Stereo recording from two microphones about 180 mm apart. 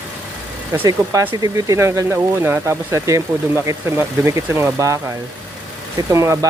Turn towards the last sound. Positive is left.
turn(degrees=-15)  # may be behind; listen again after turning